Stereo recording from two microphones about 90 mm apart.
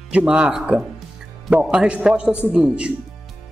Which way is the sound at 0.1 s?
15° right (ahead or behind).